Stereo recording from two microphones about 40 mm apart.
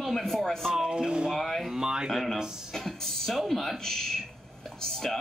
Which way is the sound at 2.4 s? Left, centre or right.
Centre.